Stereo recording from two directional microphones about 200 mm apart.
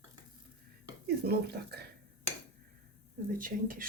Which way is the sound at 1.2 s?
50° right (ahead or behind).